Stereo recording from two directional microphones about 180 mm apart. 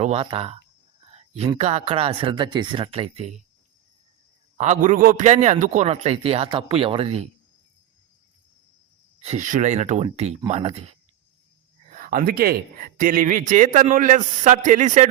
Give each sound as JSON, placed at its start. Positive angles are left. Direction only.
{"t": 0.0, "sound": "a man's voice", "side_deg": -35}
{"t": 1.1, "sound": "a sound", "side_deg": -35}
{"t": 1.5, "sound": "a man's voice", "side_deg": -35}
{"t": 4.5, "sound": "a man's voice", "side_deg": -40}
{"t": 9.2, "sound": "a man's voice", "side_deg": -40}
{"t": 11.9, "sound": "speech", "side_deg": -50}